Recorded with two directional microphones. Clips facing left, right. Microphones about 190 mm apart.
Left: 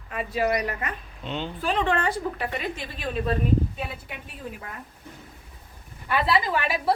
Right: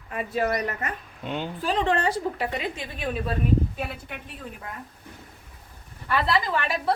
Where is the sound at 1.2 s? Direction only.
10° right (ahead or behind).